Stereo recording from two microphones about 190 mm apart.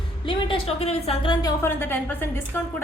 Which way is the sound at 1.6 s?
10° left (ahead or behind).